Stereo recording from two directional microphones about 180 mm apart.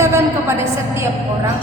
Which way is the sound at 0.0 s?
15° right (ahead or behind).